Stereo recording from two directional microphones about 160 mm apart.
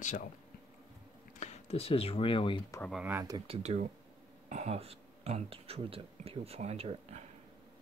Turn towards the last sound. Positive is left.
turn(degrees=-40)  # may be behind; listen again after turning